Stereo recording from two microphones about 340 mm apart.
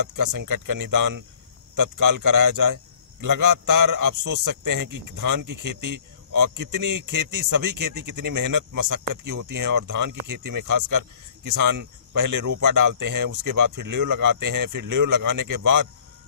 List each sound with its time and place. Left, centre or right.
0.2 s speech: right